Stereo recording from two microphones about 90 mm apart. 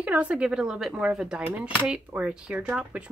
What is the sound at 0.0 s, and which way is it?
Speech, 15° right (ahead or behind).